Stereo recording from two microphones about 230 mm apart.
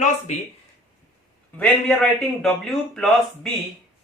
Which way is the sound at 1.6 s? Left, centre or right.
Centre.